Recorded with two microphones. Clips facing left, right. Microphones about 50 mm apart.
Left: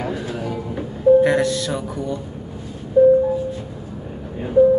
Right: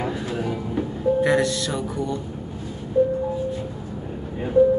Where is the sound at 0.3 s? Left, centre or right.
Centre.